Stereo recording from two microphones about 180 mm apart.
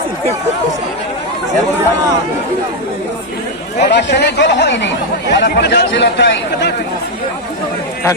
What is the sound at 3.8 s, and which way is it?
Speech, 70° left (ahead or behind).